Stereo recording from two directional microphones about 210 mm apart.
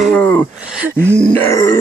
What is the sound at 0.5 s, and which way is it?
Speech, 5° right (ahead or behind).